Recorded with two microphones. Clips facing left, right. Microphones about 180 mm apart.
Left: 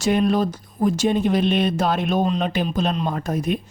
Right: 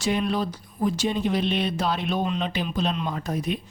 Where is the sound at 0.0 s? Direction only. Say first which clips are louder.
Left 6 dB; 45° left (ahead or behind).